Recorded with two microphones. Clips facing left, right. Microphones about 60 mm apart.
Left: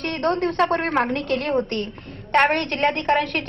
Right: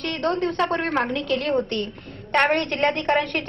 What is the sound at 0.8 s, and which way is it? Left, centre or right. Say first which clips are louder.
Speech: left 2 dB; centre.